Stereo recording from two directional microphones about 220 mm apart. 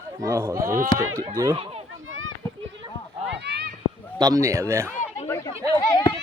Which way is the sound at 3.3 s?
50° right (ahead or behind).